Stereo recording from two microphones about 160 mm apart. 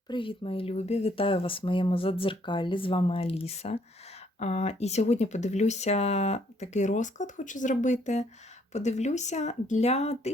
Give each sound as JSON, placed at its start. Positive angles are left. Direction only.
{"t": 0.1, "sound": "speech", "side_deg": 35}